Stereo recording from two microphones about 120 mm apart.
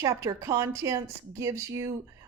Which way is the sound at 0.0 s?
25° right (ahead or behind).